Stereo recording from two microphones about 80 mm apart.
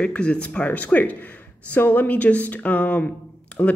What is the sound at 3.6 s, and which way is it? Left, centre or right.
Speech, left.